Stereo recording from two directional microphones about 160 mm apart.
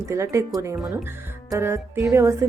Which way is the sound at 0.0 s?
15° right (ahead or behind).